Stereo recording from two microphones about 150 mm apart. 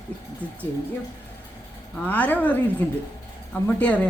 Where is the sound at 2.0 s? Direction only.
10° left (ahead or behind).